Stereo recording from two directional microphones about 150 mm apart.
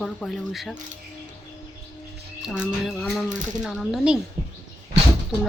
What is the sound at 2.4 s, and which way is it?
Speech, 5° right (ahead or behind).